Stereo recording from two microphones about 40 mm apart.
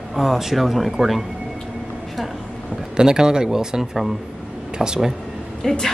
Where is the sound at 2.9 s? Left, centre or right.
Centre.